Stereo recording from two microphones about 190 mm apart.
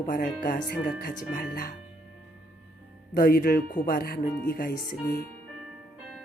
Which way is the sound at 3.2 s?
50° left (ahead or behind).